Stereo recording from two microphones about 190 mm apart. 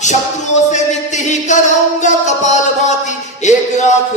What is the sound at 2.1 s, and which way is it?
Music, 40° left (ahead or behind).